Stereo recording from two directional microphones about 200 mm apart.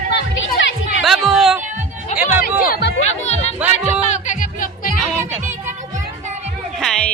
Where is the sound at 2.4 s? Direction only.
45° left (ahead or behind).